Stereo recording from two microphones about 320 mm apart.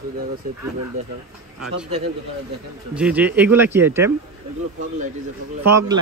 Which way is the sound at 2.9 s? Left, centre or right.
Centre.